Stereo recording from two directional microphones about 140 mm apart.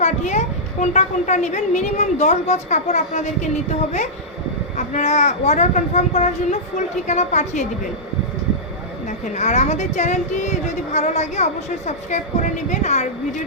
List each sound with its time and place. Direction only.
0.0 s a woman's voice: 55° left (ahead or behind)
4.8 s a woman's voice: 60° left (ahead or behind)
9.0 s a woman's voice: 55° left (ahead or behind)